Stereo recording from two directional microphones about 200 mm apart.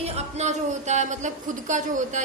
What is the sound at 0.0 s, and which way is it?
Speech, 35° right (ahead or behind).